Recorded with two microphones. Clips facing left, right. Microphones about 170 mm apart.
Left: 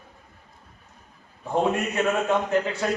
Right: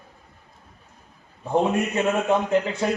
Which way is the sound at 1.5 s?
20° right (ahead or behind).